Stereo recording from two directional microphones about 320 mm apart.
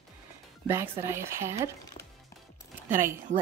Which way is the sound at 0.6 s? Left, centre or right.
Centre.